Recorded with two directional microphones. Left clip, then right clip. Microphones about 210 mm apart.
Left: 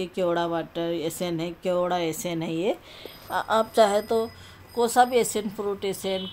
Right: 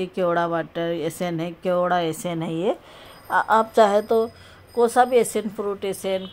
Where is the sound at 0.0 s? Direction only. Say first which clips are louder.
Right 3 dB; 10° right (ahead or behind).